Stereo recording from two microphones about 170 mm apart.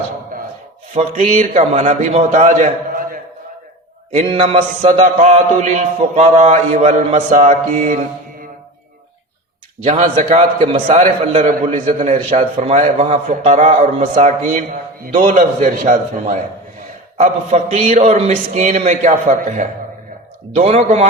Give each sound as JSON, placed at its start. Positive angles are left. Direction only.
{"t": 0.9, "sound": "a man's voice", "side_deg": -45}
{"t": 4.1, "sound": "mantra", "side_deg": -35}
{"t": 9.8, "sound": "a man's voice", "side_deg": -45}